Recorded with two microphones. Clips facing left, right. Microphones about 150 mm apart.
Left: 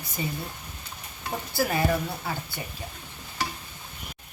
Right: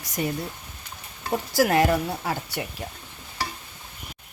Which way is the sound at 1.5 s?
90° right.